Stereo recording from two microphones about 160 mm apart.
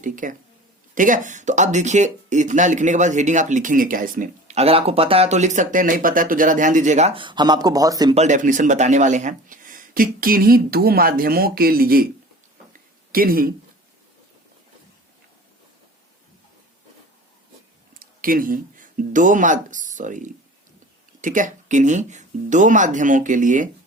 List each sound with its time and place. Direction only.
0.0 s speech: 55° right (ahead or behind)
4.5 s speech: 40° right (ahead or behind); by 8.1 s 25° right (ahead or behind)
8.1 s speech: 45° right (ahead or behind); by 12.0 s 70° right (ahead or behind)
13.1 s speech: 65° right (ahead or behind)
18.0 s speech: 65° right (ahead or behind)